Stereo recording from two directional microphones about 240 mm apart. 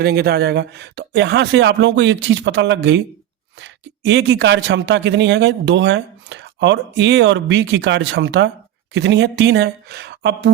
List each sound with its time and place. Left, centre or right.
0.0 s speech: right